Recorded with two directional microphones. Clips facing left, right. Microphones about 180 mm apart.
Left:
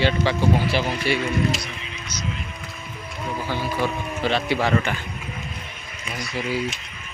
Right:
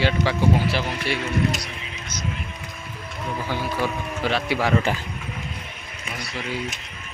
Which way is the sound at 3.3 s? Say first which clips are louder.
Even; 5° left (ahead or behind).